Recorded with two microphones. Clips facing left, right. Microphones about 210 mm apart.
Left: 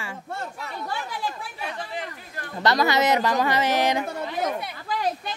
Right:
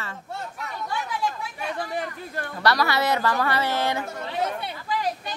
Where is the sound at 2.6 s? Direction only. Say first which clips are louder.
Left 2 dB; 20° left (ahead or behind).